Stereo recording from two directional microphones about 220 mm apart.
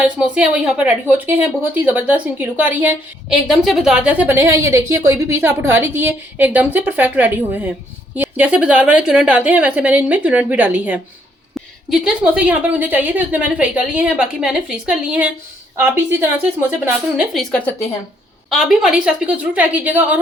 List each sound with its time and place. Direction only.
0.2 s a woman's voice: 5° right (ahead or behind)